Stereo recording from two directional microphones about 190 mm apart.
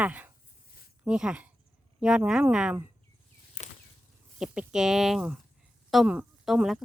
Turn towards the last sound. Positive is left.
turn(degrees=0)  # may be behind; listen again after turning